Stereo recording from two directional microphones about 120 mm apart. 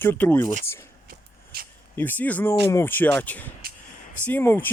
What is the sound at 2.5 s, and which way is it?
Speech, 25° left (ahead or behind).